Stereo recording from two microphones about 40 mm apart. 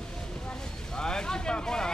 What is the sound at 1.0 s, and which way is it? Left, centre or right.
Speech, centre.